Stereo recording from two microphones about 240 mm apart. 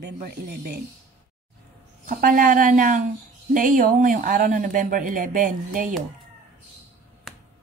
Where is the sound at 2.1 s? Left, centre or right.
Right.